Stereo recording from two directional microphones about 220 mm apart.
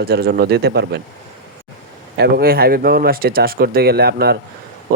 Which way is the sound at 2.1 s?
45° right (ahead or behind).